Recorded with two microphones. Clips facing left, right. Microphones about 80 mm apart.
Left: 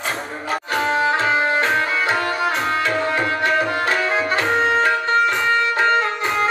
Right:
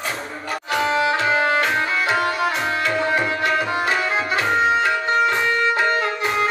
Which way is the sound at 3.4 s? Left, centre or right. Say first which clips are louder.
Left 1 dB; left.